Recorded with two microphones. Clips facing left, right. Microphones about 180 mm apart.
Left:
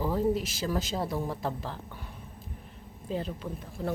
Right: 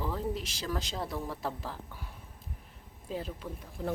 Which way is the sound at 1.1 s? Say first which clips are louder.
Left 5 dB; 25° left (ahead or behind).